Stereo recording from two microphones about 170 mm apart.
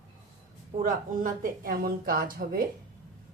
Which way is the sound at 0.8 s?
50° right (ahead or behind).